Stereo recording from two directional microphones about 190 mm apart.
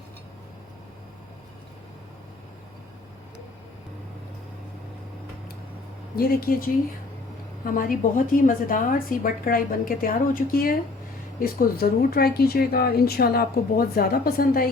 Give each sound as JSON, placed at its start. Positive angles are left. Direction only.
{"t": 6.1, "sound": "speech", "side_deg": 50}